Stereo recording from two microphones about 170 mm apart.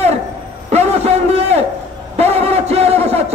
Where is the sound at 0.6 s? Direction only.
40° right (ahead or behind).